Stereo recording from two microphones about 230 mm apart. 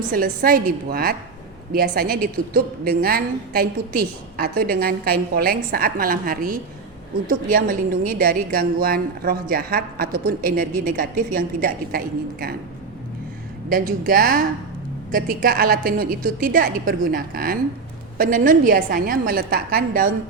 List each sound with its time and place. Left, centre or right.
0.1 s a woman's voice: right
13.7 s a woman's voice: right